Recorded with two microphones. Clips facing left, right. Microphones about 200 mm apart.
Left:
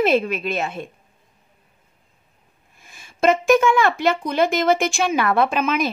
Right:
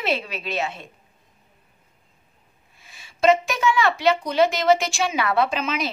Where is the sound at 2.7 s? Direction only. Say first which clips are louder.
Left 3 dB; 50° left (ahead or behind).